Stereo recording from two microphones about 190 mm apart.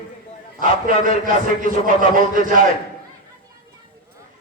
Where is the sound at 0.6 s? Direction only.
45° right (ahead or behind).